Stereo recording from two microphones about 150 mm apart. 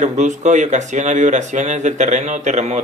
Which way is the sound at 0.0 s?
55° right (ahead or behind).